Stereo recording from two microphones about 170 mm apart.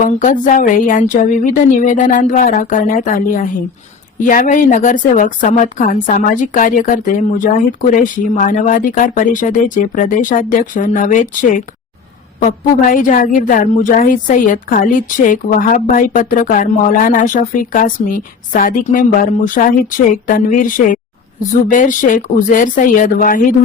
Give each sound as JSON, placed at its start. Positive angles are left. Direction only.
{"t": 0.0, "sound": "a woman's voice", "side_deg": 50}